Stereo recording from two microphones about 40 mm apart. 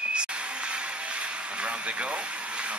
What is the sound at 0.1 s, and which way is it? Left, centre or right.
Speech, right.